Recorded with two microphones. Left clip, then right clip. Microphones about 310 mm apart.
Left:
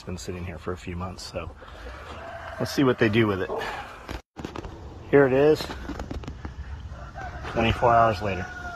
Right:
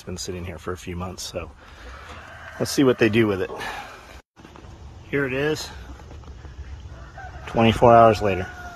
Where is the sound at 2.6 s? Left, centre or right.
Centre.